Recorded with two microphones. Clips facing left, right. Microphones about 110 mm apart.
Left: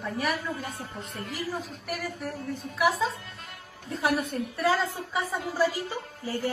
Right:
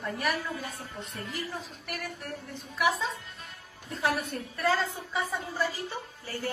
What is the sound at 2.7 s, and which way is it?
Speech, centre (ahead or behind).